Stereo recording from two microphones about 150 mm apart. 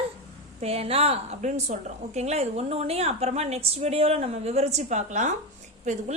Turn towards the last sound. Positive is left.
turn(degrees=-50)  # may be behind; listen again after turning